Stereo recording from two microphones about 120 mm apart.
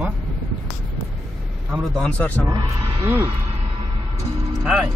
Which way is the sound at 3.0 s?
20° right (ahead or behind).